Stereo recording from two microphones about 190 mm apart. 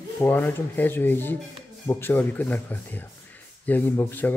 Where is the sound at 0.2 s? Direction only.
10° left (ahead or behind).